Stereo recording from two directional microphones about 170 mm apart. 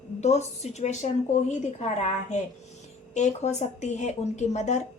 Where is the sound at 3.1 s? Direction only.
45° left (ahead or behind).